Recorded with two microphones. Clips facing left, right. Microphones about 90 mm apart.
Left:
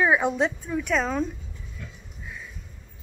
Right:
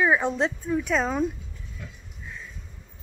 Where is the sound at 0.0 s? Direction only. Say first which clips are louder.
Left 1 dB; 5° left (ahead or behind).